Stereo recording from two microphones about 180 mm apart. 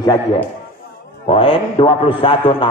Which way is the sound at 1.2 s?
30° left (ahead or behind).